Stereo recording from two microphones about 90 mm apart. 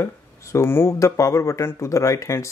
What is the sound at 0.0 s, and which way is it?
Speech, 30° left (ahead or behind).